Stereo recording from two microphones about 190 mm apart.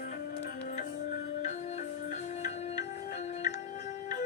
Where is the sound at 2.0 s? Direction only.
40° left (ahead or behind).